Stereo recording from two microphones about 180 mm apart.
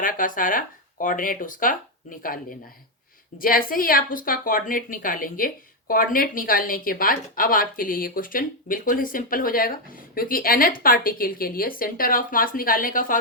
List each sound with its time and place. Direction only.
0.0 s speech: 50° left (ahead or behind)